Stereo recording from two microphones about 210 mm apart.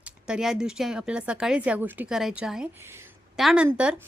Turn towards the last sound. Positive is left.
turn(degrees=-5)  # may be behind; listen again after turning